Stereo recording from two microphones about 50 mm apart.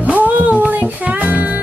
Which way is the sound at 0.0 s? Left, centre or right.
Right.